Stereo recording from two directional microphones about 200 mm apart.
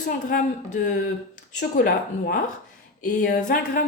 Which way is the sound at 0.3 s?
40° left (ahead or behind).